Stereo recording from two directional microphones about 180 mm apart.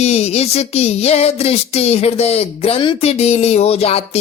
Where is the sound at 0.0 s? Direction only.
35° left (ahead or behind).